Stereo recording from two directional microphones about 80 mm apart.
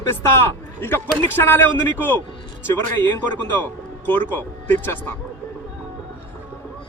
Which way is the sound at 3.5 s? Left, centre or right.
Left.